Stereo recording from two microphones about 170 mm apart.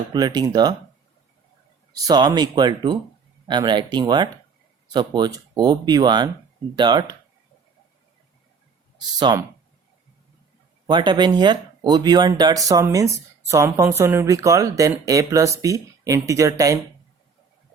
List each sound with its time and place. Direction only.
0.1 s a woman's voice: 25° right (ahead or behind)
1.9 s a woman's voice: 20° right (ahead or behind)
9.0 s speech: 25° right (ahead or behind)
10.8 s a woman's voice: 25° right (ahead or behind)